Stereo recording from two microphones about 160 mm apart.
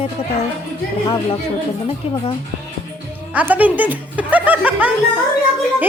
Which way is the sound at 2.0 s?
35° left (ahead or behind).